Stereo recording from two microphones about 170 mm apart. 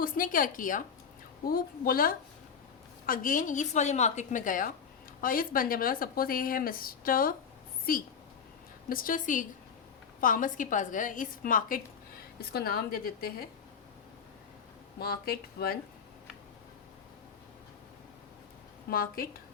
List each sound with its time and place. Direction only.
0.0 s a woman's voice: 55° left (ahead or behind)
12.5 s speech: 65° left (ahead or behind)
14.9 s speech: 65° left (ahead or behind)
18.9 s speech: 60° left (ahead or behind)